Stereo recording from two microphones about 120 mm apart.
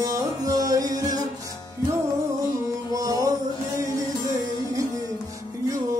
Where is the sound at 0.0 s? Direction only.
30° right (ahead or behind).